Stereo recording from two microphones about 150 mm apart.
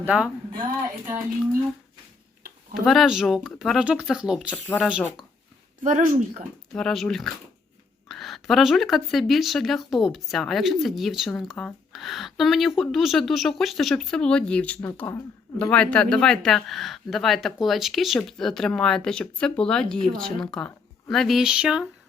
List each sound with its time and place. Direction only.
0.0 s speech: 10° right (ahead or behind)
2.7 s speech: centre (ahead or behind)
5.8 s speech: 65° right (ahead or behind)
6.7 s speech: 5° left (ahead or behind)